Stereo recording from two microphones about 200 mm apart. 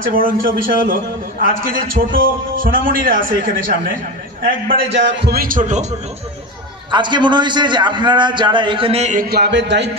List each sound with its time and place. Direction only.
0.0 s a man's voice: 45° right (ahead or behind)
4.9 s a man's voice: 60° right (ahead or behind); by 5.9 s 35° right (ahead or behind)
6.9 s a man's voice: 20° right (ahead or behind); by 9.8 s 60° right (ahead or behind)